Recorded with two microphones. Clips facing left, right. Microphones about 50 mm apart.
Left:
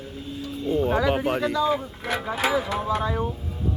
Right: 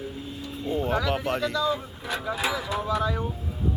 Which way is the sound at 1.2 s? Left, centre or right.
Centre.